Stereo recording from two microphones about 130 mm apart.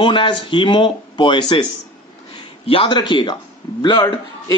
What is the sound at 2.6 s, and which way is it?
Speech, 40° left (ahead or behind).